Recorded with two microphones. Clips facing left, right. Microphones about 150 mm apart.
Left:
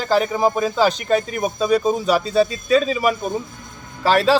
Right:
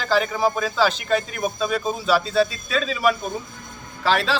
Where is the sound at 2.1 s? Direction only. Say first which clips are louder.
Even; 45° left (ahead or behind).